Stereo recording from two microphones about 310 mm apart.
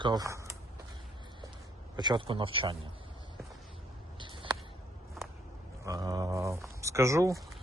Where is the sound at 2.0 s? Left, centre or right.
Centre.